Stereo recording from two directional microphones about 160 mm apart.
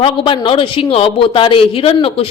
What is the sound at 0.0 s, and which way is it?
Speech, 35° left (ahead or behind).